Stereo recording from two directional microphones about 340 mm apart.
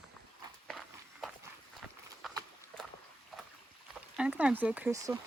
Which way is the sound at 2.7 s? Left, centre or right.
Centre.